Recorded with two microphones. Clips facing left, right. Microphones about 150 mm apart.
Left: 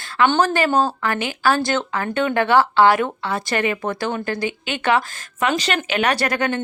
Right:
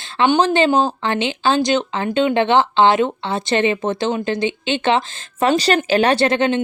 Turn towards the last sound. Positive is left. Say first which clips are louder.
# right 5 dB
turn(degrees=-25)  # may be behind; listen again after turning